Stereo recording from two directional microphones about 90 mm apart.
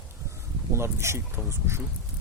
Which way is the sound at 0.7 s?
30° right (ahead or behind).